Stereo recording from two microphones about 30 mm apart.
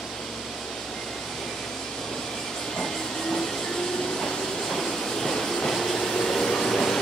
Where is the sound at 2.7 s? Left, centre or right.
Centre.